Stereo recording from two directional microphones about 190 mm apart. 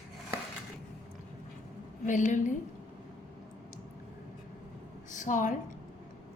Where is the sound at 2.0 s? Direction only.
40° left (ahead or behind).